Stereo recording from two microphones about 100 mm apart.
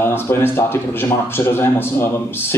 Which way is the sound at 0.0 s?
25° left (ahead or behind).